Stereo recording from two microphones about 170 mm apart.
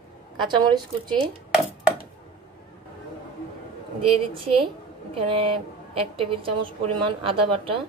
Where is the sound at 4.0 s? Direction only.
30° right (ahead or behind).